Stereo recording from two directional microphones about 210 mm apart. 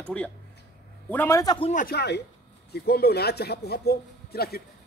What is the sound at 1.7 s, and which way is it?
Speech, 45° left (ahead or behind).